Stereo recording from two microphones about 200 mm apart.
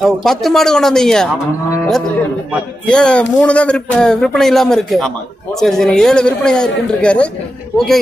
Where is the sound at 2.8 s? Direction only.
5° left (ahead or behind).